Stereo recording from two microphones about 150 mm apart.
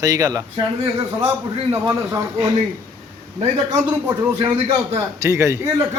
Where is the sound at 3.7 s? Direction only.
15° right (ahead or behind).